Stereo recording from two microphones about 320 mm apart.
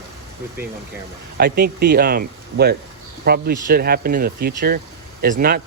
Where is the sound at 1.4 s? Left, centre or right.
Right.